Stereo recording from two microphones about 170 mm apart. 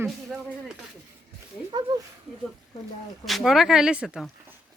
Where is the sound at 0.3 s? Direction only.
Centre (ahead or behind).